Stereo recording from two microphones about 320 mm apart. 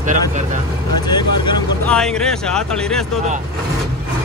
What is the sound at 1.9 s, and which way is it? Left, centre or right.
Speech, centre.